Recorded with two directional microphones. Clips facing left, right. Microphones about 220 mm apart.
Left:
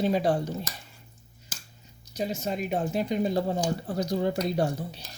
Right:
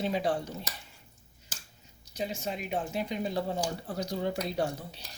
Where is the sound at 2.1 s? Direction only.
40° left (ahead or behind).